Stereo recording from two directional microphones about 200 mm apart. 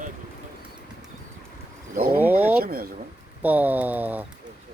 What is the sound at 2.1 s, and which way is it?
Speech, 10° right (ahead or behind).